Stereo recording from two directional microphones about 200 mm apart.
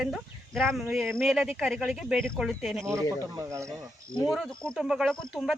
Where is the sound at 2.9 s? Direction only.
15° right (ahead or behind).